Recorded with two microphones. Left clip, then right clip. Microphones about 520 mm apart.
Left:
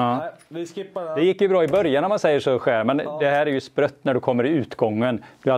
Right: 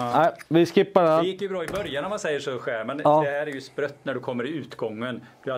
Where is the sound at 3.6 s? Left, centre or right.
Left.